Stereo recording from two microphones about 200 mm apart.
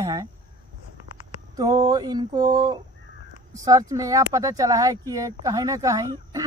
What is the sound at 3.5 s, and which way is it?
Speech, 15° right (ahead or behind).